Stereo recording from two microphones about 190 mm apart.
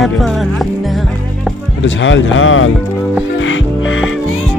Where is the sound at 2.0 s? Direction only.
85° left.